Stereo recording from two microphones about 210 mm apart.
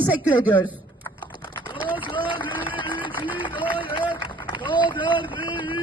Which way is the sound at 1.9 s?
25° left (ahead or behind).